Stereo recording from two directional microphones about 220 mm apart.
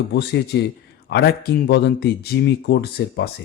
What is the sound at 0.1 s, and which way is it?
Speech, 50° left (ahead or behind).